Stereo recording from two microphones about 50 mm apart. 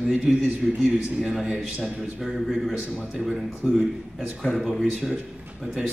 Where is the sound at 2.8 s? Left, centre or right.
Centre.